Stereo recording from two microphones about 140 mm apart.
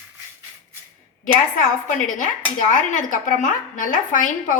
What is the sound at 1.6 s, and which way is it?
Speech, 70° left (ahead or behind).